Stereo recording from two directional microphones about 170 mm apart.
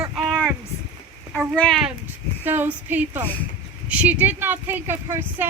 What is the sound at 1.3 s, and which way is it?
Speech, 5° left (ahead or behind).